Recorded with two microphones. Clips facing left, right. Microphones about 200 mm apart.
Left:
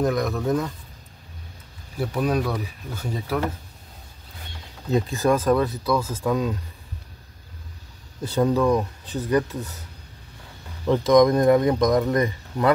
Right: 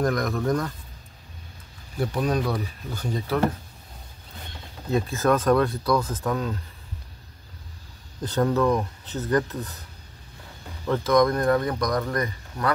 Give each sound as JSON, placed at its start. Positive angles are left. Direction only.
{"t": 0.0, "sound": "speech", "side_deg": 0}
{"t": 2.0, "sound": "speech", "side_deg": 10}
{"t": 4.9, "sound": "speech", "side_deg": 15}
{"t": 8.2, "sound": "speech", "side_deg": 10}
{"t": 10.9, "sound": "speech", "side_deg": 15}